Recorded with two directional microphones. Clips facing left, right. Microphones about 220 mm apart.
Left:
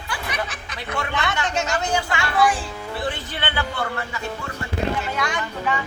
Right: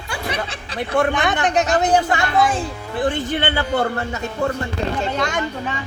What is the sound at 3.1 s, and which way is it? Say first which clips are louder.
Speech: right 7 dB; 45° right (ahead or behind).